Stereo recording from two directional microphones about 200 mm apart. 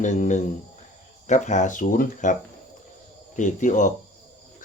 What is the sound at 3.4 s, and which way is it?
Speech, 40° left (ahead or behind).